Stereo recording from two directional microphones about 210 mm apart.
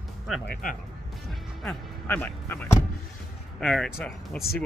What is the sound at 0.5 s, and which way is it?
Speech, 40° left (ahead or behind).